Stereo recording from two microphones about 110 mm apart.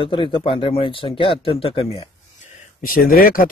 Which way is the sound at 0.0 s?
50° left (ahead or behind).